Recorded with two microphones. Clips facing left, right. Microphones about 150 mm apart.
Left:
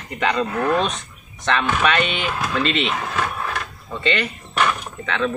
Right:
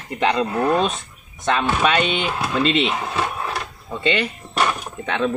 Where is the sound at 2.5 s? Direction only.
20° right (ahead or behind).